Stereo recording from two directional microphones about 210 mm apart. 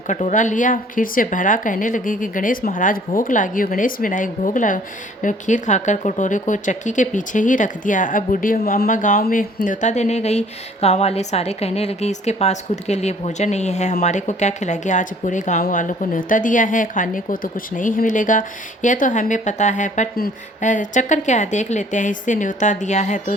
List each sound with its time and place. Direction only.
0.1 s speech: 35° left (ahead or behind)